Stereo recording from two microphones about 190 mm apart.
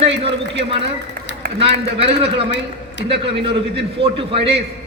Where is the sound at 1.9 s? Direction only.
30° right (ahead or behind).